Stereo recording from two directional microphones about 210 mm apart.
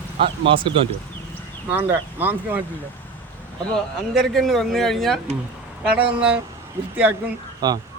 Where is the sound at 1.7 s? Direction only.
10° right (ahead or behind).